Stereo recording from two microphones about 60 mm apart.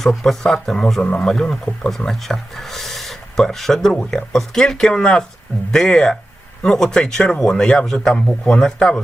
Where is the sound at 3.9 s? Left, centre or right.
Centre.